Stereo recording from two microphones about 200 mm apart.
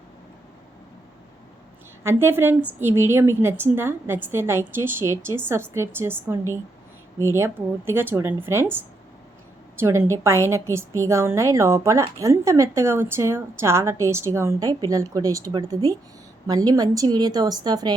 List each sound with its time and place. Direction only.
2.0 s a woman's voice: 10° right (ahead or behind)